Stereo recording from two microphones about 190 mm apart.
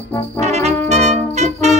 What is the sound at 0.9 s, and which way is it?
Music, 35° right (ahead or behind).